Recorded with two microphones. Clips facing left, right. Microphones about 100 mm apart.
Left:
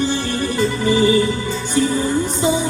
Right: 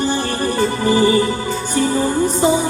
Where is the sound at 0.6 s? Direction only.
45° right (ahead or behind).